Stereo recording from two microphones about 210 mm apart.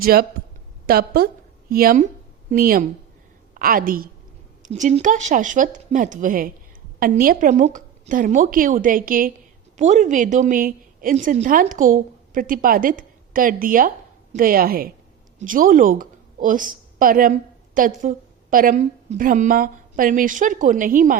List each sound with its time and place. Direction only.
0.0 s a woman's voice: 45° right (ahead or behind)